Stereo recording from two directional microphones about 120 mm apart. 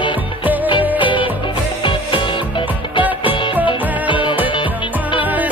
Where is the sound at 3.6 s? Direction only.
45° left (ahead or behind).